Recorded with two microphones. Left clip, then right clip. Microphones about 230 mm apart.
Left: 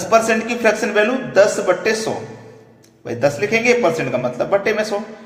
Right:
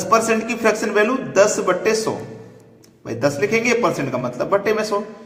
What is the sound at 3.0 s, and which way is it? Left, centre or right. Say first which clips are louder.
A man's voice: left 2 dB; centre.